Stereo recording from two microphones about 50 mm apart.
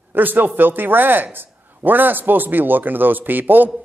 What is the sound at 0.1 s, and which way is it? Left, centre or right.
A man's voice, right.